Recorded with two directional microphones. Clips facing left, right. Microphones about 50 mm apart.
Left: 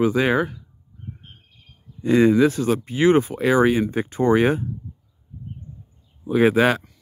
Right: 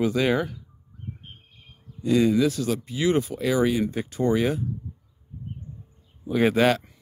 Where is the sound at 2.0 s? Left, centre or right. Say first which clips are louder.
Left 4 dB; left.